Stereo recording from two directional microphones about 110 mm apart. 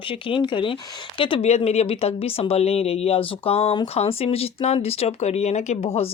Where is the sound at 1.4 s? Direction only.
75° left (ahead or behind).